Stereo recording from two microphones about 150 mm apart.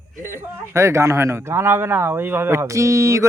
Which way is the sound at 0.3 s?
15° right (ahead or behind).